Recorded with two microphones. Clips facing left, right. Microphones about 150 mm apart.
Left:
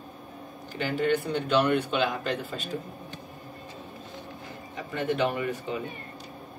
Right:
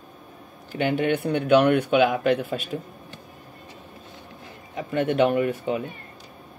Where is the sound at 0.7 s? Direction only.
65° right (ahead or behind).